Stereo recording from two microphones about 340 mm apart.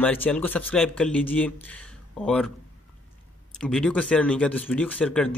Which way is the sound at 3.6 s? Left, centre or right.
Centre.